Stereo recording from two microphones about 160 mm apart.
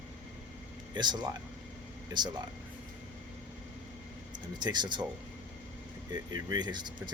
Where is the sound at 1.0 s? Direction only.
30° right (ahead or behind).